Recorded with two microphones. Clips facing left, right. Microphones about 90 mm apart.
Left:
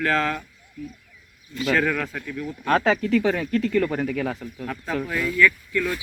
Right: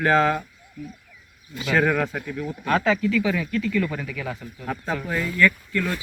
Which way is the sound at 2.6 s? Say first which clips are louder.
Left 1 dB; 40° left (ahead or behind).